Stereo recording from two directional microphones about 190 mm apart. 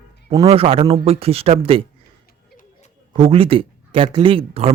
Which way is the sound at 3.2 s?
30° right (ahead or behind).